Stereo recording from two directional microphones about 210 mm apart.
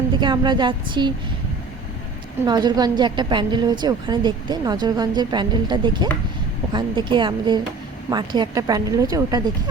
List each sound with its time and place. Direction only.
0.2 s a woman's voice: 20° right (ahead or behind)
2.4 s a woman's voice: 20° right (ahead or behind)